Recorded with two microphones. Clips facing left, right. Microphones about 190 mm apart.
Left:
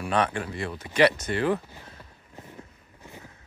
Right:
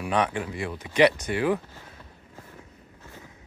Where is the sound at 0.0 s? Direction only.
15° right (ahead or behind).